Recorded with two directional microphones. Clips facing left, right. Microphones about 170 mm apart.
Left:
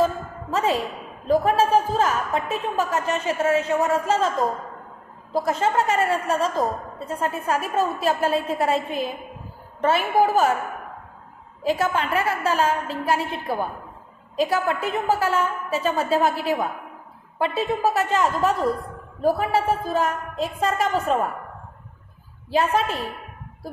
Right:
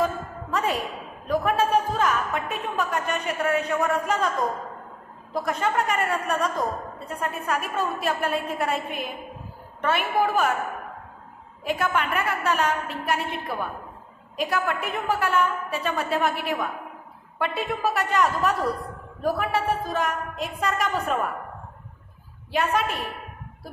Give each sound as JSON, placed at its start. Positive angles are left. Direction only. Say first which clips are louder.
{"t": 0.0, "sound": "a woman's voice", "louder": "left 4 dB", "side_deg": 25}
{"t": 5.3, "sound": "a woman's voice", "louder": "left 3 dB", "side_deg": 30}
{"t": 11.6, "sound": "a woman's voice", "louder": "left 3 dB", "side_deg": 30}
{"t": 17.4, "sound": "a woman's voice", "louder": "left 4 dB", "side_deg": 25}
{"t": 22.5, "sound": "a woman's voice", "louder": "left 3 dB", "side_deg": 30}